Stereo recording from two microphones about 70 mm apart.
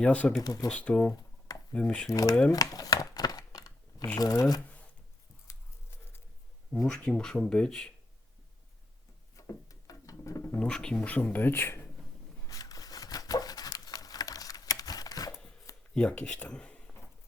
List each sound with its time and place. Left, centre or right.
0.0 s speech: centre
0.4 s speech: left
0.7 s speech: centre
1.1 s computer keyboard: left
1.7 s speech: centre
2.0 s speech: left
2.5 s a sound: left
4.2 s speech: left
5.5 s a sound: left
6.8 s speech: centre
9.3 s a sound: left
10.6 s speech: centre; by 11.9 s left
12.5 s a sound: left
16.0 s speech: centre